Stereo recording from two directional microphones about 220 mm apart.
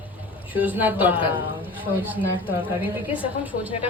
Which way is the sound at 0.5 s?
5° right (ahead or behind).